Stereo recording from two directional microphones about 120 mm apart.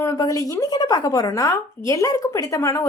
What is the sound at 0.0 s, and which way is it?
A woman's voice, 25° left (ahead or behind).